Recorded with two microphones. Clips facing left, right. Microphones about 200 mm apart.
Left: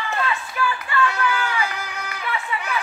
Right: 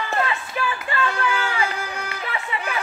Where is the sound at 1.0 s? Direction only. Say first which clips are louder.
Left 2 dB; 30° right (ahead or behind).